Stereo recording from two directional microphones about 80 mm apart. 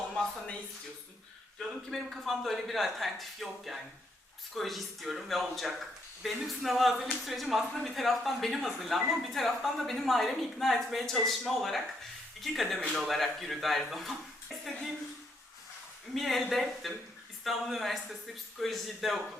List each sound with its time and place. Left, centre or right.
1.5 s speech: centre
16.1 s speech: centre